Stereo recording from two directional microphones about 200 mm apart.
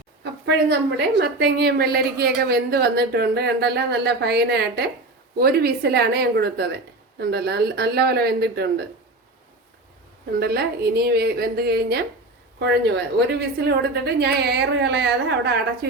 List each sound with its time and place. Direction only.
0.4 s a woman's voice: 60° right (ahead or behind)
10.4 s a woman's voice: 55° right (ahead or behind)